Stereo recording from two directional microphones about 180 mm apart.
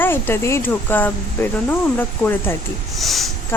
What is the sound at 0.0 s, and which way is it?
A woman's voice, 10° left (ahead or behind).